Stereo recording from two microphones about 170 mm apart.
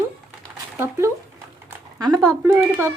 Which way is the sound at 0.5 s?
15° right (ahead or behind).